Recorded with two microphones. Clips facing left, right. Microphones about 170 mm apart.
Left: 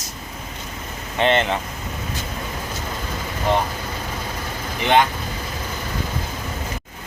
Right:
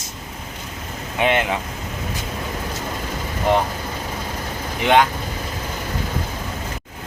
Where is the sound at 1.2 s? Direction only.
10° right (ahead or behind).